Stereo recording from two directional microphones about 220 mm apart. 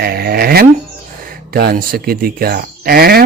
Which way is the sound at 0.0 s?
45° right (ahead or behind).